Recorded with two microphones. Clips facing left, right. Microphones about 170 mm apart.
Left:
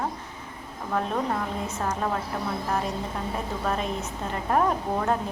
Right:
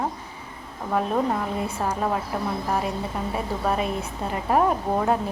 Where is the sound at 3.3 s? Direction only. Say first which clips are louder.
Right 4 dB; 10° right (ahead or behind).